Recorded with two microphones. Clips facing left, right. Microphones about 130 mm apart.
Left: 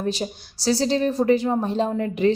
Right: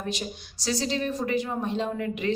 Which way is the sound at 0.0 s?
35° left (ahead or behind).